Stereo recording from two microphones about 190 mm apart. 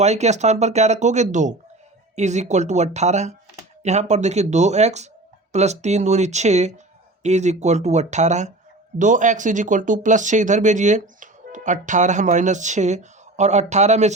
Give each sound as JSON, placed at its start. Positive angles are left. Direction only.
{"t": 0.0, "sound": "speech", "side_deg": -35}